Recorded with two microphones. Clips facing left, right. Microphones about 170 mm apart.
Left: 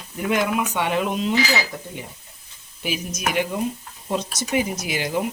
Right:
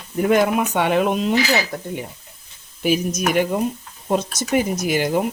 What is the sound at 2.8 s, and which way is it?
Speech, 45° right (ahead or behind).